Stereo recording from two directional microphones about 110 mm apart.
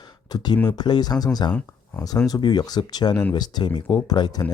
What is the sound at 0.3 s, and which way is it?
Speech, 35° left (ahead or behind).